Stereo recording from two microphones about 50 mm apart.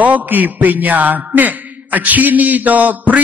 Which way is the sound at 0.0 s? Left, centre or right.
Right.